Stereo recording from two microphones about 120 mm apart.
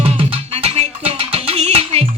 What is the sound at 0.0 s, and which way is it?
Music, 55° right (ahead or behind).